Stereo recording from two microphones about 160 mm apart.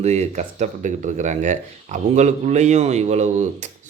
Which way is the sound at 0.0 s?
45° right (ahead or behind).